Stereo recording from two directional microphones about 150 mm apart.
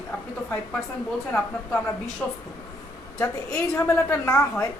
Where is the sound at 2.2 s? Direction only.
15° left (ahead or behind).